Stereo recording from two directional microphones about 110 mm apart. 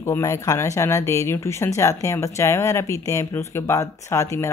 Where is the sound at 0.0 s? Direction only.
25° left (ahead or behind).